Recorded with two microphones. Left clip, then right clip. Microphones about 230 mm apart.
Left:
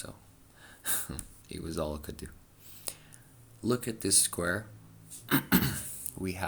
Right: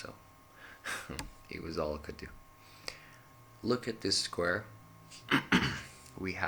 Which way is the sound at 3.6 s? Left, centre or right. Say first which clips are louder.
Left 1 dB; left.